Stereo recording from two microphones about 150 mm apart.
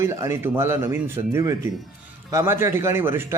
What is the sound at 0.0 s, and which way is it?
Speech, 15° right (ahead or behind).